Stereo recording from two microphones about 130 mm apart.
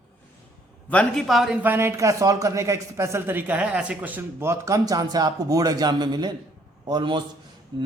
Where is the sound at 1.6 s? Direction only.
15° right (ahead or behind).